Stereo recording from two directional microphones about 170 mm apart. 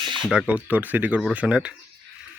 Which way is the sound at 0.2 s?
5° right (ahead or behind).